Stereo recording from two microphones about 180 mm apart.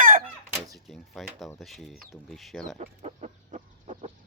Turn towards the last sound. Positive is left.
turn(degrees=-35)  # may be behind; listen again after turning